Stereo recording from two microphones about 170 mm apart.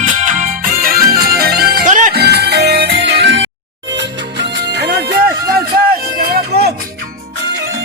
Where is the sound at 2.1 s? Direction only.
70° right (ahead or behind).